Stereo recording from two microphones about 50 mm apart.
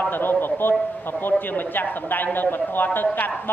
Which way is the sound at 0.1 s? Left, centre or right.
Left.